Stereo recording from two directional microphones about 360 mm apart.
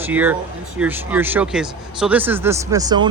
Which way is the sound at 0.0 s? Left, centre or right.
Centre.